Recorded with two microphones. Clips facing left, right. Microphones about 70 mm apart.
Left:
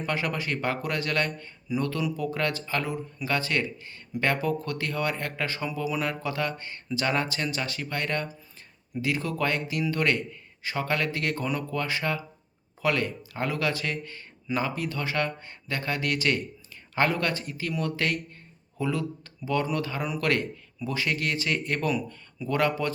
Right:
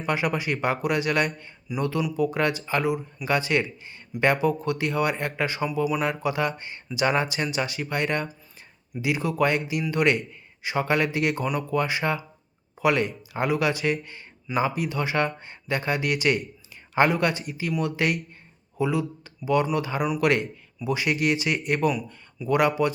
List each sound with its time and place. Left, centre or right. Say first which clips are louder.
0.0 s speech: right 4 dB; centre